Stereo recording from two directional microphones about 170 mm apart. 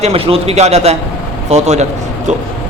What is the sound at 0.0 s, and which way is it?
A man's voice, 35° right (ahead or behind).